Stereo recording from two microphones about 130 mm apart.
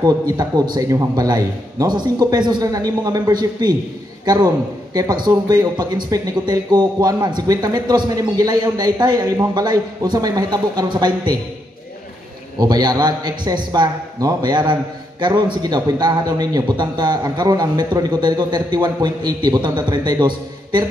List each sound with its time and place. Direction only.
0.0 s a man's voice: 30° right (ahead or behind)
4.9 s a man's voice: 30° right (ahead or behind)
12.5 s a man's voice: 35° right (ahead or behind)